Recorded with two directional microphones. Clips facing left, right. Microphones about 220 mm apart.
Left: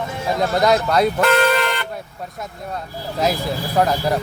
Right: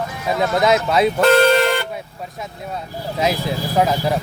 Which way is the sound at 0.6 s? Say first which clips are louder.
Even; centre (ahead or behind).